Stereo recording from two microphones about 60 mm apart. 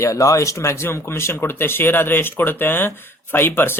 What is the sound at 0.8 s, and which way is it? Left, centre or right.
Speech, left.